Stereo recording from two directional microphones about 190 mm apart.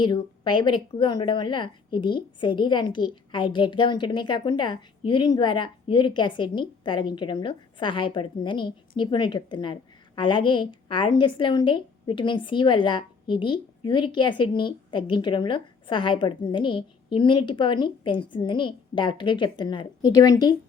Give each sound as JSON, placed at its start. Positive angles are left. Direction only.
{"t": 0.0, "sound": "a woman's voice", "side_deg": 25}